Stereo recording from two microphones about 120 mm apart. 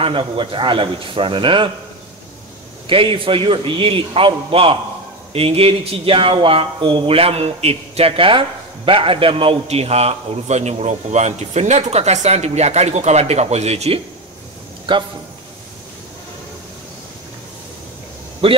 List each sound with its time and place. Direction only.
0.0 s a man's voice: 45° right (ahead or behind)
2.9 s a man's voice: 45° right (ahead or behind)
14.9 s a man's voice: 45° right (ahead or behind)
18.4 s a man's voice: 50° right (ahead or behind)